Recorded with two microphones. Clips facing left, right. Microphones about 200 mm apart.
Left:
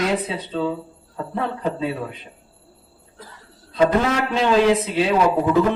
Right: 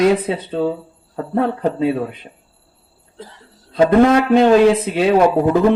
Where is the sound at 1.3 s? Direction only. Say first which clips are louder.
Right 7 dB; 55° right (ahead or behind).